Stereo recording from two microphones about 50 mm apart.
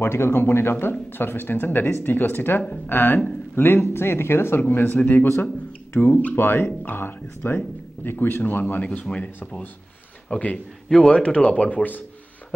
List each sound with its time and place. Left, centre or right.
0.0 s speech: left
4.6 s speech: left
9.1 s speech: centre
10.3 s speech: left
10.9 s speech: centre
11.1 s speech: left